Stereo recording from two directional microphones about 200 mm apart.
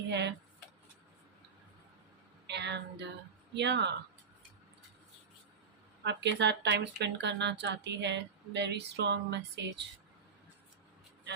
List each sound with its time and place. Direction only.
0.1 s speech: 60° right (ahead or behind)
2.5 s speech: 60° right (ahead or behind)
6.1 s speech: 60° right (ahead or behind)